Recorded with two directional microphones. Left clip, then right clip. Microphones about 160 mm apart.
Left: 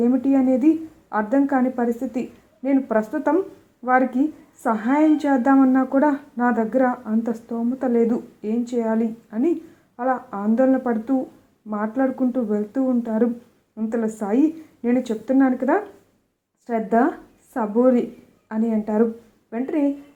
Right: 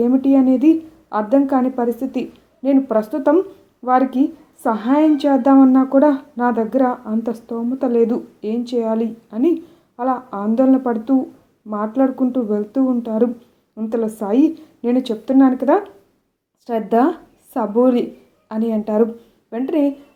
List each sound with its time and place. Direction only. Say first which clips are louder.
0.0 s a woman's voice: right 4 dB; 10° right (ahead or behind)